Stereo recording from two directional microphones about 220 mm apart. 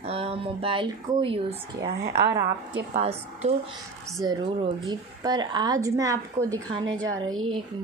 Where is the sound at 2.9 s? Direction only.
30° right (ahead or behind).